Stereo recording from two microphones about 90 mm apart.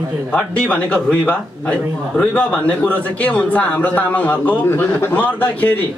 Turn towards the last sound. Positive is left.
turn(degrees=20)  # may be behind; listen again after turning